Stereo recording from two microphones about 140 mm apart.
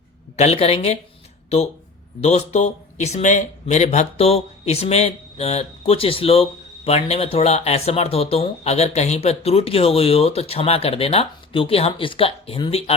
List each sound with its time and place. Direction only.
0.3 s speech: 50° left (ahead or behind)